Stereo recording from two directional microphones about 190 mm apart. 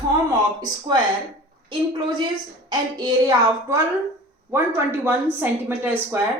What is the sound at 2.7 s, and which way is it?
A woman's voice, 20° right (ahead or behind).